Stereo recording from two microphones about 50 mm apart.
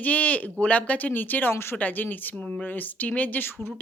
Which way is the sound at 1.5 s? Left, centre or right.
Left.